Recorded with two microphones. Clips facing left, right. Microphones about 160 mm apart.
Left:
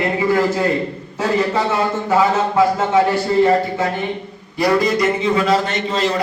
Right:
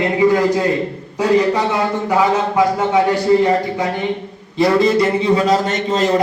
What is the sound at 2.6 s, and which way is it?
A man's voice, 15° right (ahead or behind).